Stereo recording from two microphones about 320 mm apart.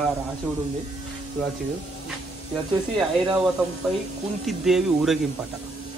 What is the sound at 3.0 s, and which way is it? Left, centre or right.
A man's voice, centre.